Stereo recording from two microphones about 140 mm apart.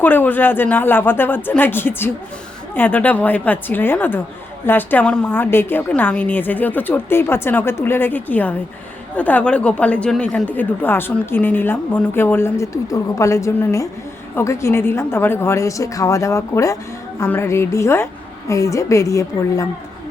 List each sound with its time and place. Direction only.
0.0 s a woman's voice: 15° left (ahead or behind)